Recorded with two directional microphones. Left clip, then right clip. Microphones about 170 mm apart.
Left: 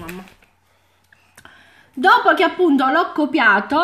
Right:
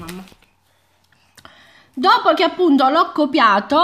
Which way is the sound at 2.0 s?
35° right (ahead or behind).